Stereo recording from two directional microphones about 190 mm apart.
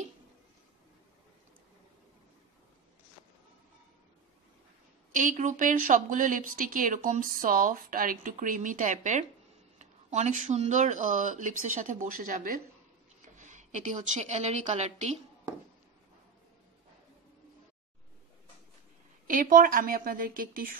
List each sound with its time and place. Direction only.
5.1 s a woman's voice: 40° right (ahead or behind)
19.2 s speech: 45° right (ahead or behind)